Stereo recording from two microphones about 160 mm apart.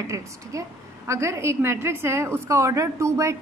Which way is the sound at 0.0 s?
20° right (ahead or behind).